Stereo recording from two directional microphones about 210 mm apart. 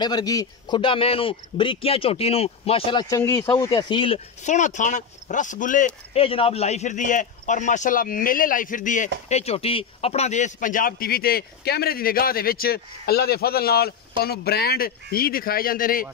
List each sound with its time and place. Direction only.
0.0 s a man's voice: 20° left (ahead or behind); by 16.1 s 40° left (ahead or behind)